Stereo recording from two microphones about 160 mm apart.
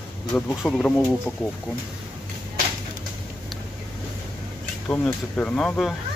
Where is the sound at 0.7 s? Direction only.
5° left (ahead or behind).